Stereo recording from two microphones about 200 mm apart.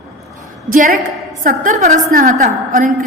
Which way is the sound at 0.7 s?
40° right (ahead or behind).